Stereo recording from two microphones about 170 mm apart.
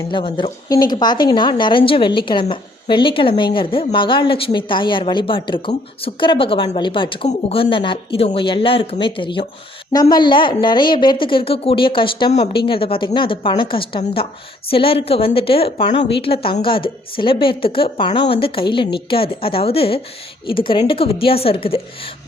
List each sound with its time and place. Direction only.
0.0 s a woman's voice: 30° left (ahead or behind)